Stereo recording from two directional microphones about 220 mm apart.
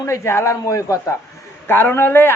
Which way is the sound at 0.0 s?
10° left (ahead or behind).